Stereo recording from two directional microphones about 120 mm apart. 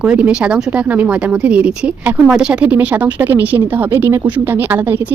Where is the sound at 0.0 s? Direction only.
10° right (ahead or behind).